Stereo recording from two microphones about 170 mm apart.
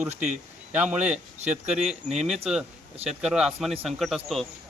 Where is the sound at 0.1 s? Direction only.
45° right (ahead or behind).